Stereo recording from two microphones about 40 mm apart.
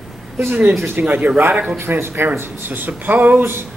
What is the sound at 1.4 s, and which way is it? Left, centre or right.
Speech, right.